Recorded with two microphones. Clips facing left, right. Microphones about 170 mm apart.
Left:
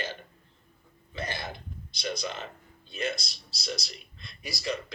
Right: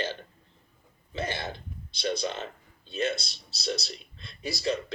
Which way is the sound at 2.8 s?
15° left (ahead or behind).